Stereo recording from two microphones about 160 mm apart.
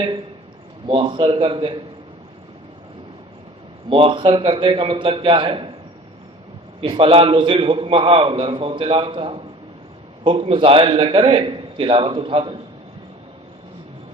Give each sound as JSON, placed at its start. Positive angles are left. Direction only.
{"t": 0.9, "sound": "a man's voice", "side_deg": -30}
{"t": 3.8, "sound": "a man's voice", "side_deg": -30}
{"t": 6.8, "sound": "a man's voice", "side_deg": -35}